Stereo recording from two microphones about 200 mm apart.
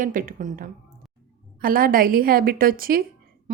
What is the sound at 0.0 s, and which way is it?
A woman's voice, 45° right (ahead or behind).